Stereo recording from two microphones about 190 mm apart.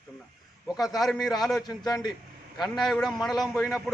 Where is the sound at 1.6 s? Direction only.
20° left (ahead or behind).